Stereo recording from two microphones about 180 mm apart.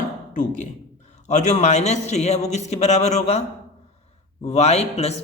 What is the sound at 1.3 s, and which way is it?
Speech, 40° left (ahead or behind).